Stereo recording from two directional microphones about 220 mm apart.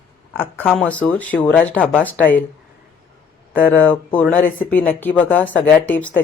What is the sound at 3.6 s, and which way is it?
Speech, 10° left (ahead or behind).